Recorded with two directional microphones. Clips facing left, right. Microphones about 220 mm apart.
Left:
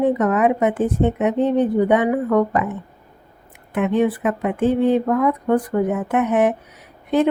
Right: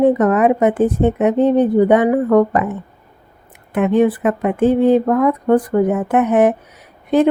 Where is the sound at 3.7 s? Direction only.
45° right (ahead or behind).